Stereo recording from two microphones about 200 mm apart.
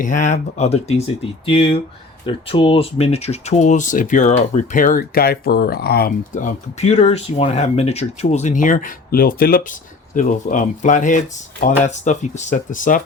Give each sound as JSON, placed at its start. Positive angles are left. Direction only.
{"t": 0.0, "sound": "speech", "side_deg": 40}